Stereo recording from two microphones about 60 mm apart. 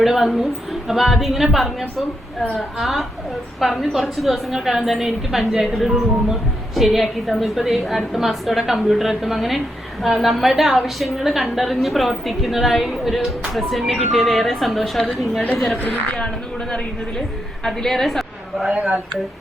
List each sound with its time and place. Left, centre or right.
0.0 s a woman's voice: centre
15.7 s a woman's voice: left
16.1 s a woman's voice: centre
18.7 s speech: centre